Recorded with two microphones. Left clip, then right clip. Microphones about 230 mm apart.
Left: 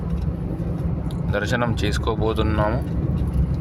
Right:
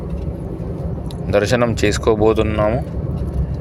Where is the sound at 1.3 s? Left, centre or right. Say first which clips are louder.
Right 8 dB; centre.